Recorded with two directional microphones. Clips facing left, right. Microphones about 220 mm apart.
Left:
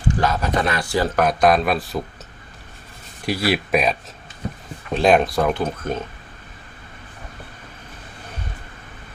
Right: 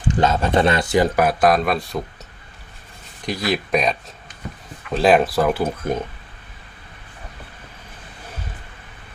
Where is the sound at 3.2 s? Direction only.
5° left (ahead or behind).